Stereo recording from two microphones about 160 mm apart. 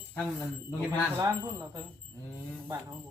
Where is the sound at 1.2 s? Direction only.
15° right (ahead or behind).